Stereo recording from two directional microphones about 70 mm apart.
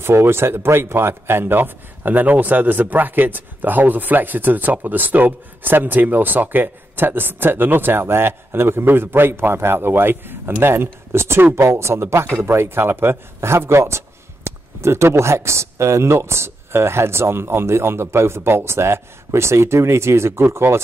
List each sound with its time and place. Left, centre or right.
0.0 s speech: right